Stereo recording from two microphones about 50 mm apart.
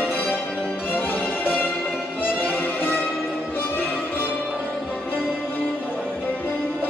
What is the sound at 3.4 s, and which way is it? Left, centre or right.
Music, left.